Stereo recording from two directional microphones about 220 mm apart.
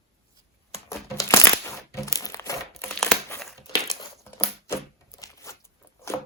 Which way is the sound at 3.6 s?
20° left (ahead or behind).